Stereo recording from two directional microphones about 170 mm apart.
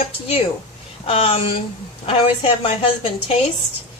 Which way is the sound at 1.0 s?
35° left (ahead or behind).